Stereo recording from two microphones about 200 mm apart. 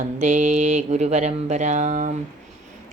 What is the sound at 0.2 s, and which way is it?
Speech, 35° right (ahead or behind).